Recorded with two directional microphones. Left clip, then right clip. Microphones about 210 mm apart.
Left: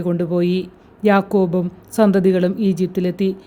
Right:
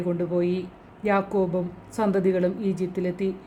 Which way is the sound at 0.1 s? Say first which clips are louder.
Left 6 dB; 40° left (ahead or behind).